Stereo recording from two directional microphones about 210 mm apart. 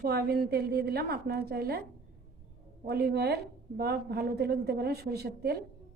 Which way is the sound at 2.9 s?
50° right (ahead or behind).